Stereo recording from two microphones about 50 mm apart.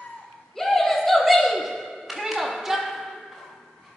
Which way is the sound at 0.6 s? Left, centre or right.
Centre.